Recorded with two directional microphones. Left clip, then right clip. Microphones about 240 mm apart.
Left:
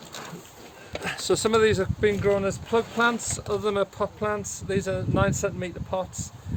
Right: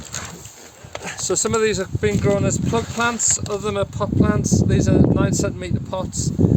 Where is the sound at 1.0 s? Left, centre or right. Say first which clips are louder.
Right 2 dB; centre.